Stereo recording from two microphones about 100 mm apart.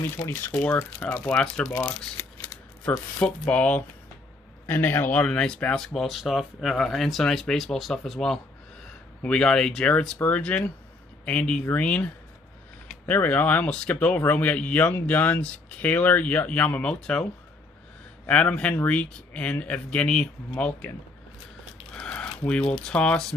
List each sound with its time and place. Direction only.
0.0 s speech: 25° left (ahead or behind)
3.3 s speech: 15° left (ahead or behind)
21.9 s a sound: 10° left (ahead or behind)
22.5 s speech: 10° left (ahead or behind)